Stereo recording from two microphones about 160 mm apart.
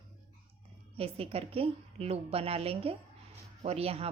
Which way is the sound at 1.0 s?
35° right (ahead or behind).